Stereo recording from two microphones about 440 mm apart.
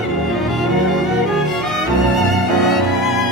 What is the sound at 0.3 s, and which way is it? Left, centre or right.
Music, centre.